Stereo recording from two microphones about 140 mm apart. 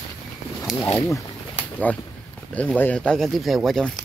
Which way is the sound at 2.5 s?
10° left (ahead or behind).